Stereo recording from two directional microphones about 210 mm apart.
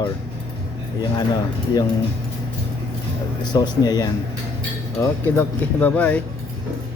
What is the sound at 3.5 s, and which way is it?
Speech, 20° left (ahead or behind).